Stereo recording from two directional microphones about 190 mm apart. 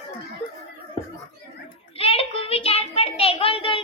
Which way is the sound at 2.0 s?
30° left (ahead or behind).